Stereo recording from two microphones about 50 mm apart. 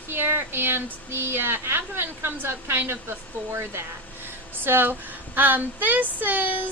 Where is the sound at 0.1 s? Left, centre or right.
Right.